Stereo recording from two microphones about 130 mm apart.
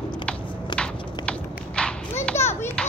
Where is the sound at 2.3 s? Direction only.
20° left (ahead or behind).